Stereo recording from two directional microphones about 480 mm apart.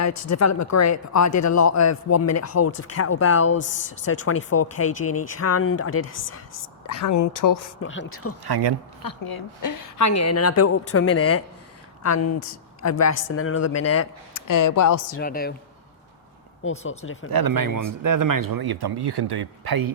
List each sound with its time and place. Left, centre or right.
0.0 s speech: left
7.8 s speech: left
8.4 s speech: right
9.0 s speech: left
15.2 s speech: centre
17.0 s speech: left
17.4 s speech: right